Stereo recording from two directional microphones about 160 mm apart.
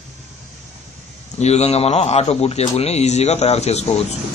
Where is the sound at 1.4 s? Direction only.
40° left (ahead or behind).